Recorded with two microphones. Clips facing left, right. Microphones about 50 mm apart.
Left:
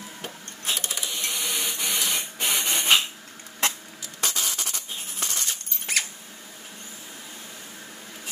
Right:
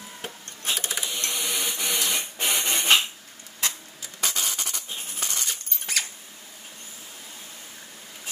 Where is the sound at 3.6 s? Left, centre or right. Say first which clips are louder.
Left 4 dB; left.